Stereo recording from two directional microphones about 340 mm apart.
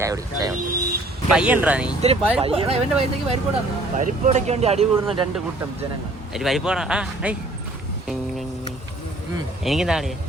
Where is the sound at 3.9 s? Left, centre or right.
Right.